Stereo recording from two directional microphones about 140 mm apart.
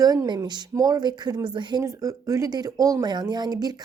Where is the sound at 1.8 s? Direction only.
20° right (ahead or behind).